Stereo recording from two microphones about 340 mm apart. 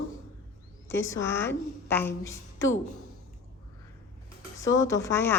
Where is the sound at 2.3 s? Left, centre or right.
Left.